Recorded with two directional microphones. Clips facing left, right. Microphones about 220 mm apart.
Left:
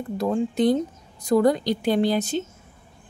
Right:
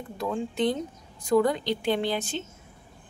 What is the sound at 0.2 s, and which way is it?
Speech, 40° left (ahead or behind).